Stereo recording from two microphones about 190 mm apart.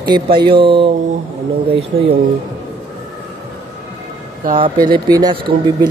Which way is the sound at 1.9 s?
50° right (ahead or behind).